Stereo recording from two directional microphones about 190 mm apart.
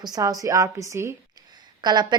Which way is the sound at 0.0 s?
20° right (ahead or behind).